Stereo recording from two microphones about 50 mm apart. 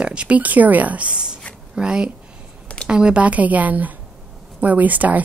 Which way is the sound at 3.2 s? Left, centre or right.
Right.